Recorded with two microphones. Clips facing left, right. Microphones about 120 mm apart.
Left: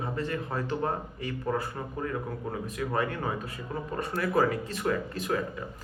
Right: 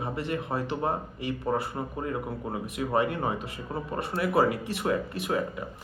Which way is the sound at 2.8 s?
20° right (ahead or behind).